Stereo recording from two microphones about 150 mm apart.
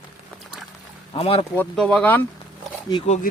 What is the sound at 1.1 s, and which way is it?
Speech, 40° left (ahead or behind).